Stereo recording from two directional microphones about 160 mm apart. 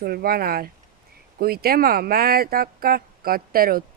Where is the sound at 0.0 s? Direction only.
70° right (ahead or behind).